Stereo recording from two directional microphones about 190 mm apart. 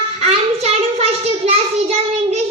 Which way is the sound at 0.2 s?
35° right (ahead or behind).